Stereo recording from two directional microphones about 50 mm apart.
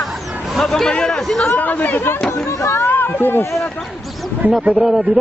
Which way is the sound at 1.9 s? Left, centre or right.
Left.